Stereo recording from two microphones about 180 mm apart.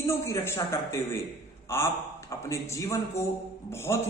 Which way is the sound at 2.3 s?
15° left (ahead or behind).